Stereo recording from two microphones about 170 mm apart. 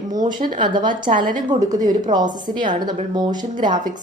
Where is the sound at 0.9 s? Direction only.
50° right (ahead or behind).